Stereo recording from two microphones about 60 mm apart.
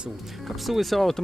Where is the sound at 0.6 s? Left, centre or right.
Centre.